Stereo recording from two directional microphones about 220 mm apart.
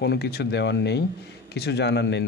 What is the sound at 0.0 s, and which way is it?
Speech, 50° left (ahead or behind).